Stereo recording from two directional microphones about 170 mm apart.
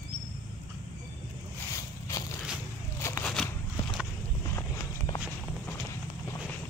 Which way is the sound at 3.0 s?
15° left (ahead or behind).